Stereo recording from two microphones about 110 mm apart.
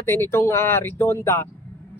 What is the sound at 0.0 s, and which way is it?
Speech, 20° left (ahead or behind).